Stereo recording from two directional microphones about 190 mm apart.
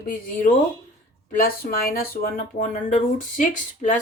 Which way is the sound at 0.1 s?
45° left (ahead or behind).